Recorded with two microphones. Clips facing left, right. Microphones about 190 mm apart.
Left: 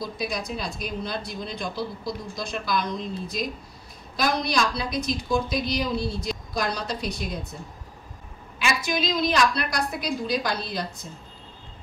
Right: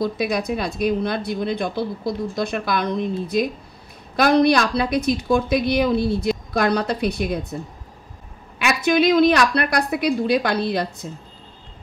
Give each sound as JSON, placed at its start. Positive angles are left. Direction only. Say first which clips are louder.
{"t": 0.0, "sound": "speech", "louder": "right 8 dB", "side_deg": -60}
{"t": 8.5, "sound": "speech", "louder": "right 8 dB", "side_deg": -60}